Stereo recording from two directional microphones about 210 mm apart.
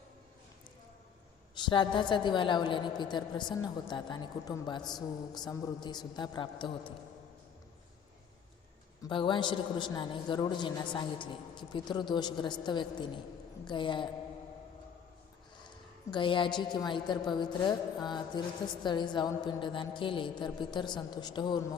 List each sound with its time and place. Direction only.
1.5 s a woman's voice: 20° left (ahead or behind)
9.0 s a woman's voice: 20° left (ahead or behind)
16.1 s a woman's voice: 25° left (ahead or behind)